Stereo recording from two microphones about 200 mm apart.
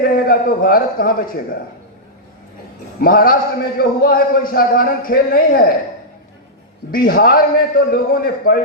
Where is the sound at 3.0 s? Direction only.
50° left (ahead or behind).